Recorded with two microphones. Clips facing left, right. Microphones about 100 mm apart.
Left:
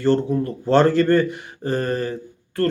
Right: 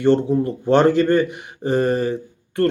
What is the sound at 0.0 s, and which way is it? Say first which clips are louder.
Speech: right 3 dB; 20° right (ahead or behind).